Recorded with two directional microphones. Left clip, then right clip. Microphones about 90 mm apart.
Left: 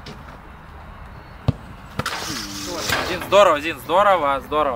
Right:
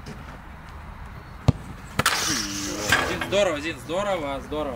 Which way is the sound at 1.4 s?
10° right (ahead or behind).